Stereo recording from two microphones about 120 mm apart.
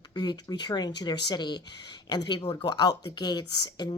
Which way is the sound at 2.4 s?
50° left (ahead or behind).